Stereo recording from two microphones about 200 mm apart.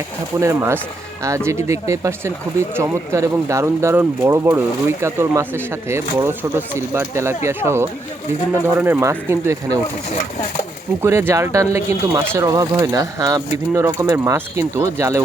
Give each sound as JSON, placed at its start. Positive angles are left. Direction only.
{"t": 0.3, "sound": "speech", "side_deg": -15}
{"t": 11.0, "sound": "speech", "side_deg": -10}